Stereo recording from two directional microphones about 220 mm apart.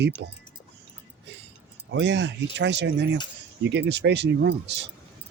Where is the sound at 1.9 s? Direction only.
55° right (ahead or behind).